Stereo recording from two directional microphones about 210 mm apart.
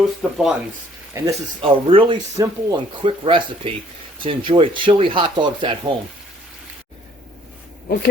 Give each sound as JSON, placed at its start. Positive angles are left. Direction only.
{"t": 0.0, "sound": "speech", "side_deg": 0}
{"t": 1.6, "sound": "speech", "side_deg": -25}